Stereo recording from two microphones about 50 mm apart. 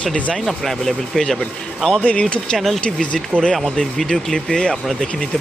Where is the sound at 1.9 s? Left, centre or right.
Left.